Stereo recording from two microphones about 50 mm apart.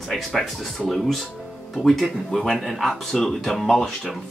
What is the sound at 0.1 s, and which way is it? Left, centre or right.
Speech, centre.